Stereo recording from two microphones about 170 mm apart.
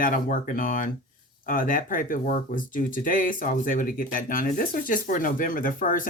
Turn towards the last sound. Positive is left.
turn(degrees=55)  # may be behind; listen again after turning